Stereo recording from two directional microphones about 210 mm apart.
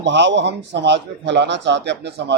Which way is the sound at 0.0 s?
55° right (ahead or behind).